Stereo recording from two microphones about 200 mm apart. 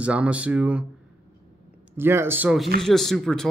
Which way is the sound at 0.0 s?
5° right (ahead or behind).